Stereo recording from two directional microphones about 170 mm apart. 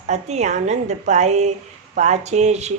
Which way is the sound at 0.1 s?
40° right (ahead or behind).